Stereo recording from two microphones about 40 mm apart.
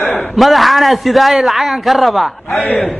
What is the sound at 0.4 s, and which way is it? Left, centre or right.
A man's voice, centre.